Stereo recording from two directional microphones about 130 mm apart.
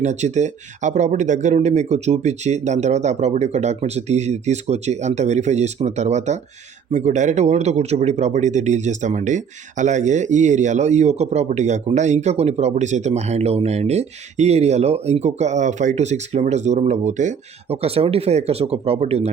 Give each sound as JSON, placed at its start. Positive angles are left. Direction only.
{"t": 0.0, "sound": "speech", "side_deg": -60}
{"t": 17.7, "sound": "speech", "side_deg": -50}